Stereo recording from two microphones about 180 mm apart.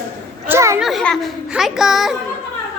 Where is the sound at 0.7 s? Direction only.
Centre (ahead or behind).